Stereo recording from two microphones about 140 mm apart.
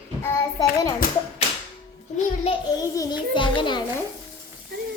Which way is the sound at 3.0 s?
30° left (ahead or behind).